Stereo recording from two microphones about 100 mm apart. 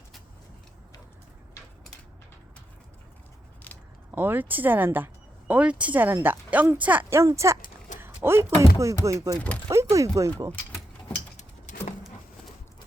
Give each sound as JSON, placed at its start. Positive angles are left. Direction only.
{"t": 4.1, "sound": "speech", "side_deg": -20}
{"t": 7.3, "sound": "speech", "side_deg": -30}